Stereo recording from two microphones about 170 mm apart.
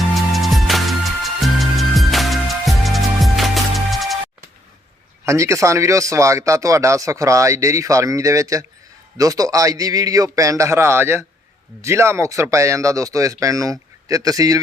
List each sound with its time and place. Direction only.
0.3 s music: centre (ahead or behind)
5.2 s speech: 15° right (ahead or behind)